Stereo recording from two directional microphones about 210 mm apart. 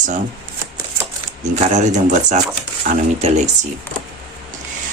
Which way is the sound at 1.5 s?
35° right (ahead or behind).